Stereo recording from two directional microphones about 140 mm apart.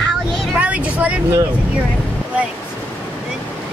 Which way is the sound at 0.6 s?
10° right (ahead or behind).